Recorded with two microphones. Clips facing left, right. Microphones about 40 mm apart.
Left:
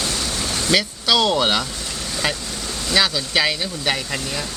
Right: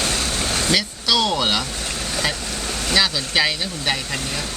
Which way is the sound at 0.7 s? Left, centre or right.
Centre.